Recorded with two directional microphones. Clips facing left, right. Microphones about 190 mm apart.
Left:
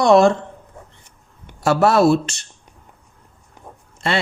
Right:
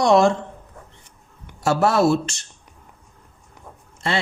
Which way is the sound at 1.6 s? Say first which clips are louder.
Left 3 dB; 65° left (ahead or behind).